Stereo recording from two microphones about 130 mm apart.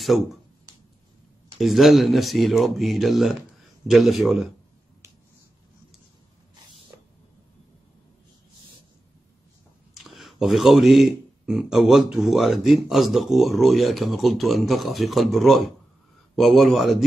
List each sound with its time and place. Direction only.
0.0 s speech: centre (ahead or behind)
1.6 s speech: centre (ahead or behind)
9.9 s speech: centre (ahead or behind)